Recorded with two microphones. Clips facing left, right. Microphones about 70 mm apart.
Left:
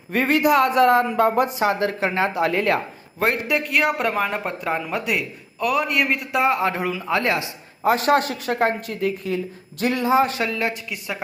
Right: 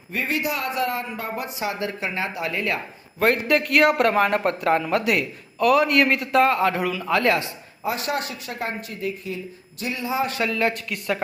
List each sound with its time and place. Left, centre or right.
0.1 s speech: left
1.5 s speech: left
2.4 s speech: left
3.4 s speech: centre
6.5 s speech: left
7.9 s speech: left
8.9 s speech: left
9.8 s a man's voice: left
10.1 s speech: left
10.8 s speech: centre